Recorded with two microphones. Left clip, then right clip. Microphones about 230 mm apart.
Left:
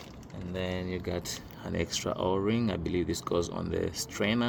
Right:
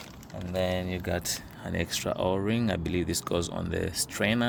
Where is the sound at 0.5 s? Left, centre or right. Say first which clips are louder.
Right 5 dB; right.